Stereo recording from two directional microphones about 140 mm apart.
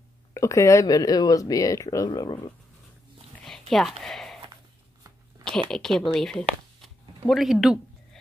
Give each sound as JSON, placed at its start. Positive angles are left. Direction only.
{"t": 0.3, "sound": "speech", "side_deg": 20}
{"t": 3.7, "sound": "a sound", "side_deg": 0}
{"t": 5.7, "sound": "speech", "side_deg": 5}